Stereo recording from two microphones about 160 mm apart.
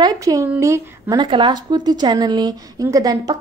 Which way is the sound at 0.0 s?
20° right (ahead or behind).